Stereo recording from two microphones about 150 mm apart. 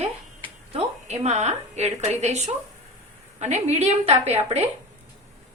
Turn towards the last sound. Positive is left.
turn(degrees=-45)  # may be behind; listen again after turning